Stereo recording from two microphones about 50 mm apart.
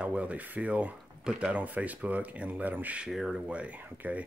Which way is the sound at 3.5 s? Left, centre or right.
Right.